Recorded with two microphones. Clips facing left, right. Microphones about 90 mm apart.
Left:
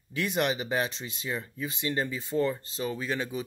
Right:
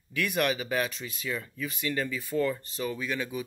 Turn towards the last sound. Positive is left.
turn(degrees=30)  # may be behind; listen again after turning